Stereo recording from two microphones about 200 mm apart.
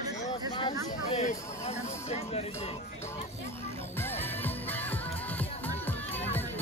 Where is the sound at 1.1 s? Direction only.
35° left (ahead or behind).